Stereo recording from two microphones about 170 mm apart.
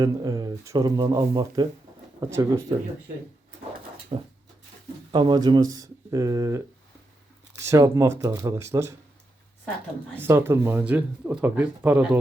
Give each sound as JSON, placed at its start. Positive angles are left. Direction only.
{"t": 0.0, "sound": "speech", "side_deg": -20}
{"t": 4.1, "sound": "a sound", "side_deg": -35}
{"t": 5.1, "sound": "speech", "side_deg": -25}
{"t": 10.2, "sound": "speech", "side_deg": -15}